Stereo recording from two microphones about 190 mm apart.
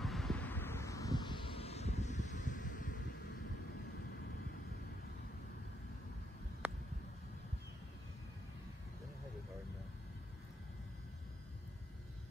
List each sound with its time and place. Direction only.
0.0 s vehicle: centre (ahead or behind); by 3.0 s 45° left (ahead or behind)